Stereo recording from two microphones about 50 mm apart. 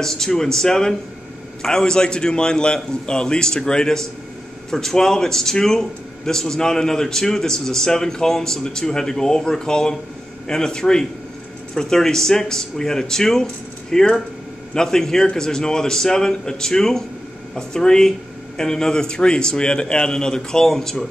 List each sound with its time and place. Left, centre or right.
0.0 s speech: centre